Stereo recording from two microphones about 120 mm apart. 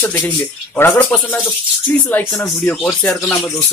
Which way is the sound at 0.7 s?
15° left (ahead or behind).